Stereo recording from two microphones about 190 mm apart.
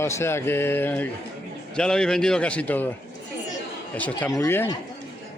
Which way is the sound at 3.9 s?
10° left (ahead or behind).